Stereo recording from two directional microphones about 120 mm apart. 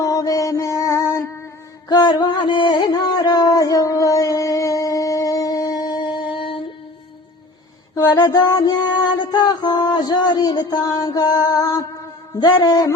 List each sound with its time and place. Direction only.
0.0 s mantra: 30° left (ahead or behind)
1.9 s a sound: 35° left (ahead or behind)
7.9 s music: 35° left (ahead or behind)